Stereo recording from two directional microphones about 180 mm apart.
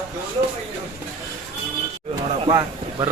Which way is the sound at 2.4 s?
25° right (ahead or behind).